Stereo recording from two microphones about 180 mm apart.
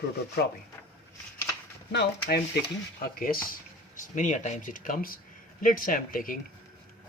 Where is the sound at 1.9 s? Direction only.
65° left (ahead or behind).